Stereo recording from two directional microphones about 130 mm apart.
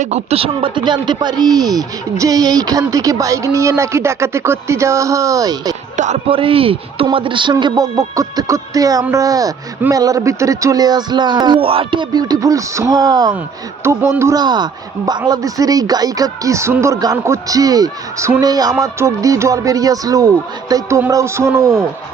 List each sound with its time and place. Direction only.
0.0 s speech: 55° right (ahead or behind); by 5.7 s 30° right (ahead or behind)
6.2 s speech: 45° right (ahead or behind)
7.5 s speech: 25° right (ahead or behind)